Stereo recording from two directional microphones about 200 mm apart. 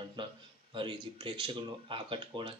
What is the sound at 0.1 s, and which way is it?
Speech, 25° right (ahead or behind).